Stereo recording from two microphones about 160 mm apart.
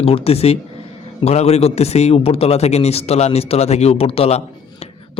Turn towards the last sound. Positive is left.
turn(degrees=40)  # may be behind; listen again after turning